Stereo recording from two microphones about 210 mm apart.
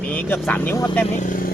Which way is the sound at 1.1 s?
40° left (ahead or behind).